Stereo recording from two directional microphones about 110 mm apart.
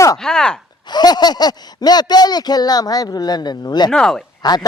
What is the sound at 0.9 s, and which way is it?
Speech, 40° left (ahead or behind).